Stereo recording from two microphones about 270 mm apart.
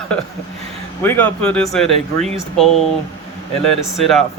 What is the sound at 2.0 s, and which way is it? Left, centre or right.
Speech, right.